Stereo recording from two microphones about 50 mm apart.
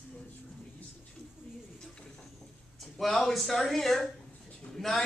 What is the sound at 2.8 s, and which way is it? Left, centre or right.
Speech, centre.